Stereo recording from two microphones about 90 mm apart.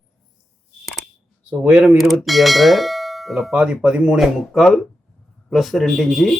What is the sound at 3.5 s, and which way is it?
Speech, 10° right (ahead or behind).